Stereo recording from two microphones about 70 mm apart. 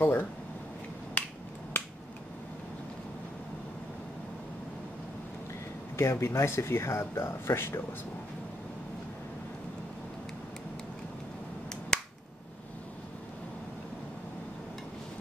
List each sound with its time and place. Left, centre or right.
0.0 s speech: left
1.2 s finger snapping: left
5.9 s speech: left
11.9 s finger snapping: centre